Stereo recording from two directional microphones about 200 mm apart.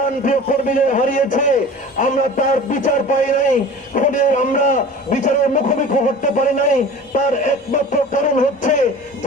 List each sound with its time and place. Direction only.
0.3 s a man's voice: 40° left (ahead or behind)